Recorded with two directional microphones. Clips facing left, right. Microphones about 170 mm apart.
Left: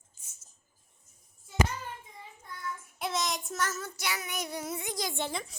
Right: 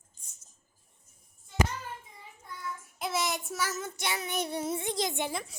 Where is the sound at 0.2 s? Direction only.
5° left (ahead or behind).